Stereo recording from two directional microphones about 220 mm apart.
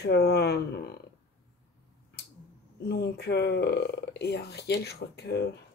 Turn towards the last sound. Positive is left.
turn(degrees=50)  # may be behind; listen again after turning